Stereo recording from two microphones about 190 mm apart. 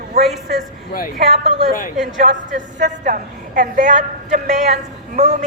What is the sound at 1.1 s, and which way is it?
A woman's voice, 35° right (ahead or behind).